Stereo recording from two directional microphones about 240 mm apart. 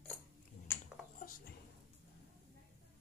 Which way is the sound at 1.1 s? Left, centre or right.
Left.